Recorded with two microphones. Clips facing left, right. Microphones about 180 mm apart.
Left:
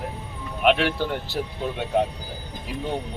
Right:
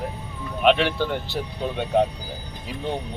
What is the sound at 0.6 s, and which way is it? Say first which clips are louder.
Speech: right 1 dB; 5° left (ahead or behind).